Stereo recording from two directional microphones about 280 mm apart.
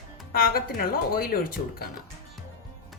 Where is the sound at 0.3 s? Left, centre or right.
Left.